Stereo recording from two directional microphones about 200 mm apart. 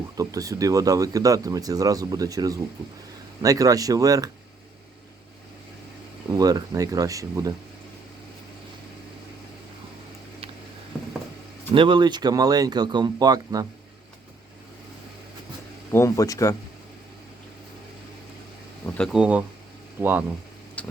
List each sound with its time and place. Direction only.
0.2 s speech: 15° right (ahead or behind)
6.3 s speech: 20° right (ahead or behind)
11.7 s speech: 25° right (ahead or behind)
15.9 s speech: 15° left (ahead or behind)
18.9 s speech: centre (ahead or behind)
20.8 s vehicle: 5° left (ahead or behind)